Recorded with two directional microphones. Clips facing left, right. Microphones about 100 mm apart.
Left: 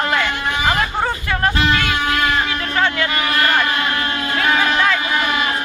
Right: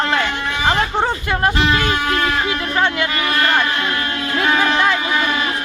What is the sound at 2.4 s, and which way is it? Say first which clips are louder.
Speech: right 1 dB; 20° right (ahead or behind).